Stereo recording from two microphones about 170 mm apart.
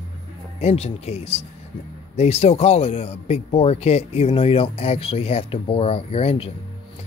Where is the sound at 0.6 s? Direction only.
40° left (ahead or behind).